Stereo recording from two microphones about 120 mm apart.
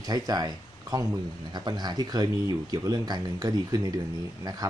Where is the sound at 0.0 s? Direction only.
30° right (ahead or behind).